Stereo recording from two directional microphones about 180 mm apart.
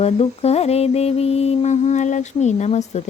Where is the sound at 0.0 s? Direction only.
35° left (ahead or behind).